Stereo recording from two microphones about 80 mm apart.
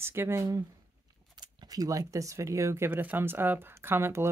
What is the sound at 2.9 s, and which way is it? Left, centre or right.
Speech, right.